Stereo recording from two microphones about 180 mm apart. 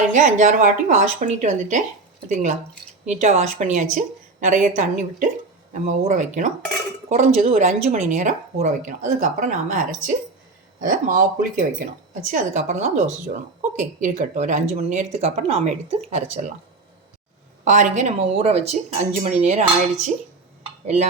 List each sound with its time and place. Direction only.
0.1 s speech: 45° right (ahead or behind)
17.7 s speech: 40° right (ahead or behind)